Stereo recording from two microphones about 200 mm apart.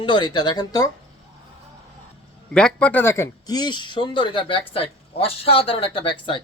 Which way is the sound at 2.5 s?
5° left (ahead or behind).